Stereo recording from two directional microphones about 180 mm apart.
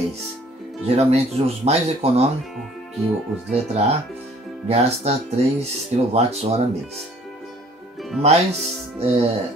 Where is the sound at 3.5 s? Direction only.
35° right (ahead or behind).